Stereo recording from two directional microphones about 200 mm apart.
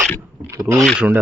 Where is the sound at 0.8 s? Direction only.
Centre (ahead or behind).